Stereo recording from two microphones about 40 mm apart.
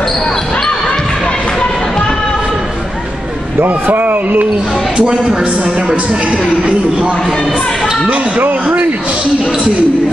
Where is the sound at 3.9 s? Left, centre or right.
Right.